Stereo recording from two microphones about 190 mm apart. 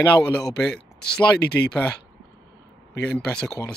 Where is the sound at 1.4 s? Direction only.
60° left (ahead or behind).